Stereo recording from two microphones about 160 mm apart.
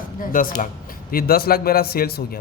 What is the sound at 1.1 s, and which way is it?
A man's voice, 70° left (ahead or behind).